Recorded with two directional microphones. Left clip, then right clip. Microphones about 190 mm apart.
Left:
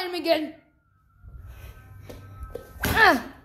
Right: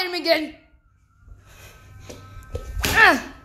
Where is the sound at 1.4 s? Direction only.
Centre (ahead or behind).